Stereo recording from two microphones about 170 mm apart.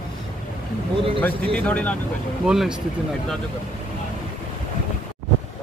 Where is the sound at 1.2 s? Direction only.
5° left (ahead or behind).